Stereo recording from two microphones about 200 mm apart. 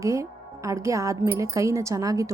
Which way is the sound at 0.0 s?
15° right (ahead or behind).